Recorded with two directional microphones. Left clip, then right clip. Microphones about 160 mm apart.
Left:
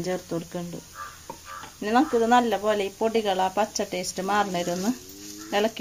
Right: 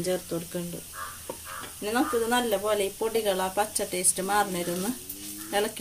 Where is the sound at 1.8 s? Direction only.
60° left (ahead or behind).